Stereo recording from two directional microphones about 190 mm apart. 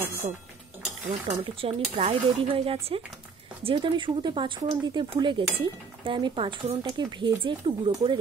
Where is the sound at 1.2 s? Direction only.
30° right (ahead or behind).